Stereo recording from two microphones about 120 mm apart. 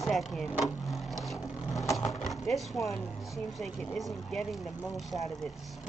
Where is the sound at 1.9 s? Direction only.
30° left (ahead or behind).